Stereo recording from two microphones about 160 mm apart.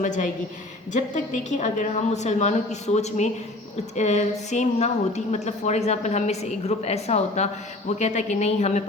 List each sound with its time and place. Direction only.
0.0 s a woman's voice: 55° left (ahead or behind)